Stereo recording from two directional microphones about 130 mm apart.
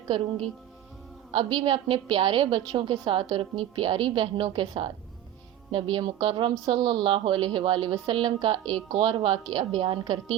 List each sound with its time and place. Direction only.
1.3 s a woman's voice: 40° right (ahead or behind)